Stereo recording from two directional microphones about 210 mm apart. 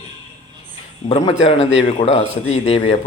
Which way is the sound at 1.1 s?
30° left (ahead or behind).